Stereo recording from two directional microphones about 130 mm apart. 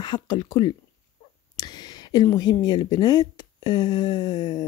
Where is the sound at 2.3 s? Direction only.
30° left (ahead or behind).